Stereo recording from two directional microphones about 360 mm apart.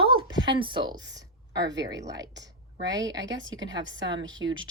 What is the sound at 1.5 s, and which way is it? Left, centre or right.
Speech, right.